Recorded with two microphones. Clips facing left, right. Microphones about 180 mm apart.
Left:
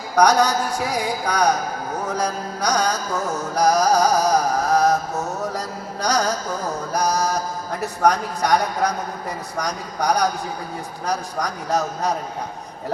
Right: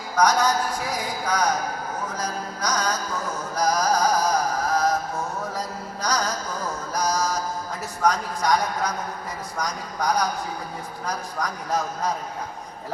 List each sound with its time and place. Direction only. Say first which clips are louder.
0.2 s a man's voice: left 4 dB; 75° left (ahead or behind)
3.5 s music: left 5 dB; 75° left (ahead or behind)
6.9 s a man's voice: left 3 dB; 65° left (ahead or behind)